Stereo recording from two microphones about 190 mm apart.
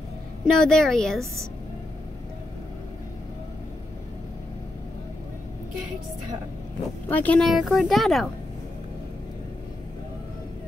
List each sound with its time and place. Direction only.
0.5 s speech: 5° left (ahead or behind)
7.1 s speech: 10° left (ahead or behind)